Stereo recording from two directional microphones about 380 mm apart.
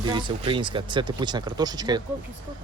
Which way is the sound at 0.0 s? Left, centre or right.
Centre.